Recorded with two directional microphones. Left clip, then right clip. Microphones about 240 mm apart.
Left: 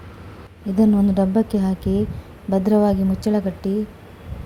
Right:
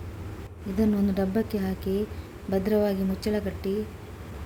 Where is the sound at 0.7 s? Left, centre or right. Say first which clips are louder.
Left 8 dB; centre.